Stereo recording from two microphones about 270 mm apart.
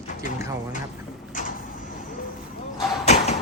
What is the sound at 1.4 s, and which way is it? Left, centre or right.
Sliding door, left.